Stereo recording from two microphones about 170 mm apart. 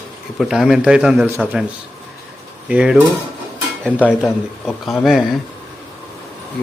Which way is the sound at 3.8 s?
10° left (ahead or behind).